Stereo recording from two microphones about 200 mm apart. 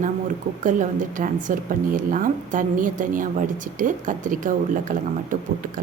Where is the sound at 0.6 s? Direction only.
40° right (ahead or behind).